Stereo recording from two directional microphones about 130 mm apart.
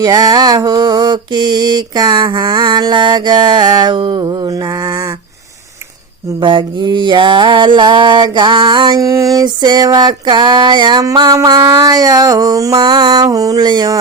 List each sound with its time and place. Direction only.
0.0 s mantra: 30° right (ahead or behind)
6.4 s mantra: 40° right (ahead or behind)